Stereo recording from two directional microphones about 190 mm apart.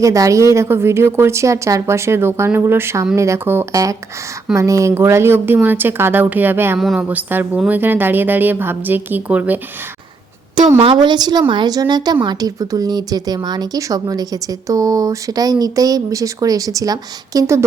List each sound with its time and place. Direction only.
0.0 s a woman's voice: 15° right (ahead or behind)
10.8 s speech: 25° right (ahead or behind)